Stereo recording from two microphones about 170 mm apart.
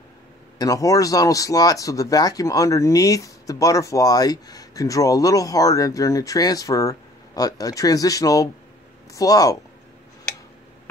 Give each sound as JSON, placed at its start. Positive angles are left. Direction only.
{"t": 0.6, "sound": "speech", "side_deg": 20}